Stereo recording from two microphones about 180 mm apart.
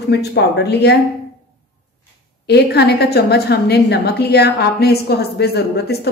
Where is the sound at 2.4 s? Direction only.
65° left (ahead or behind).